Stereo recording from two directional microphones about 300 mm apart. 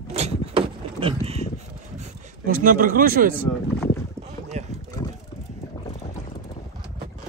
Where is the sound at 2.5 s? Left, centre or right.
Right.